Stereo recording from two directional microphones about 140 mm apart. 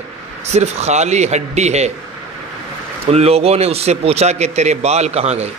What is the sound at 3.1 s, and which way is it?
A man's voice, 45° right (ahead or behind).